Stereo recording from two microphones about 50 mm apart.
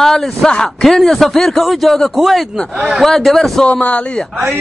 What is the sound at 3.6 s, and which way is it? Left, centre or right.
Speech, left.